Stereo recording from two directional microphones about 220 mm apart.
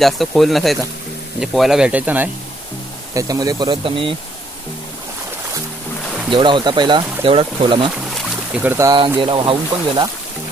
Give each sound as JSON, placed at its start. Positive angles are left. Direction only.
{"t": 0.0, "sound": "speech", "side_deg": 0}
{"t": 6.3, "sound": "speech", "side_deg": -20}
{"t": 8.1, "sound": "boat", "side_deg": -5}
{"t": 9.2, "sound": "speech", "side_deg": -20}